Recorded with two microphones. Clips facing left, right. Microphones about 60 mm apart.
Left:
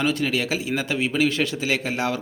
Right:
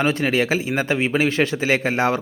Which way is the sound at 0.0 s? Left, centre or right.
Right.